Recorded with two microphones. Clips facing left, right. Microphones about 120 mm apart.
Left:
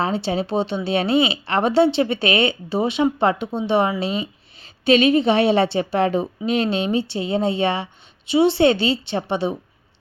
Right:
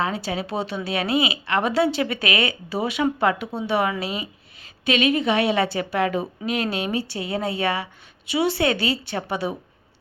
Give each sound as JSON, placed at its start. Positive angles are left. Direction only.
{"t": 0.0, "sound": "a woman's voice", "side_deg": 30}